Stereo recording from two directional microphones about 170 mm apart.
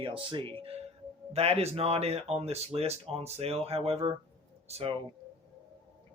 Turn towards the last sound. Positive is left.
turn(degrees=-35)  # may be behind; listen again after turning